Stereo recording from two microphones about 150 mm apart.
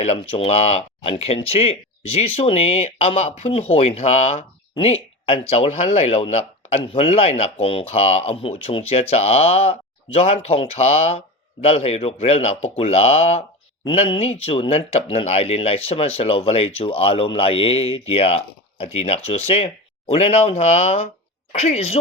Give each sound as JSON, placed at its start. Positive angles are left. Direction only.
{"t": 0.0, "sound": "speech", "side_deg": 40}